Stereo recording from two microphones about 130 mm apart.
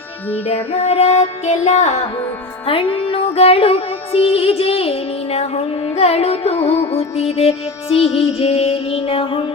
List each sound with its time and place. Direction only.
0.4 s music: 50° left (ahead or behind)
2.6 s music: 40° left (ahead or behind)